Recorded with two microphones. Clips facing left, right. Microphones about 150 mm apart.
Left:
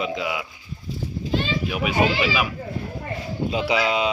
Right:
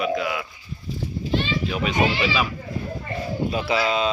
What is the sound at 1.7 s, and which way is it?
Speech, 10° left (ahead or behind).